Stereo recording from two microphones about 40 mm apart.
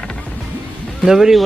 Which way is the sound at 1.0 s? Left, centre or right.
Centre.